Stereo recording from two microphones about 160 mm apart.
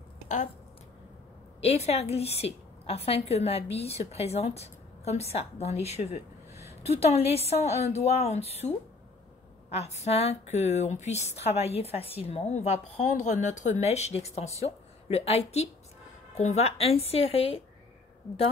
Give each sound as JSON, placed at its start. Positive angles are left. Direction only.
{"t": 1.6, "sound": "a woman's voice", "side_deg": 40}